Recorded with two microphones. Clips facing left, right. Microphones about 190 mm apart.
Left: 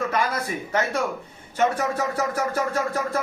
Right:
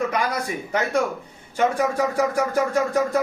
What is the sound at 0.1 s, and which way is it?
Speech, 15° right (ahead or behind).